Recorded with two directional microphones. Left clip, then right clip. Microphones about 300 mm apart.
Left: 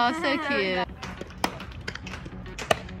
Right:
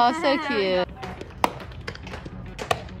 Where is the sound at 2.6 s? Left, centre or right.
Right.